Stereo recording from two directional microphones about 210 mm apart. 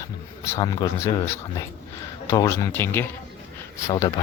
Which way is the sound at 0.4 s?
15° left (ahead or behind).